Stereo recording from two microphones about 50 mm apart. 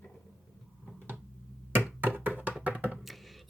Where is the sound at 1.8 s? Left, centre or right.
Right.